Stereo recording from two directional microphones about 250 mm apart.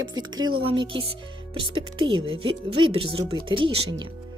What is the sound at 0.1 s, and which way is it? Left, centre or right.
Speech, centre.